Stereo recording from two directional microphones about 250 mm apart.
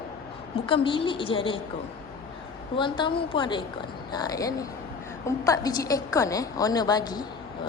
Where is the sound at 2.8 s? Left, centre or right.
Centre.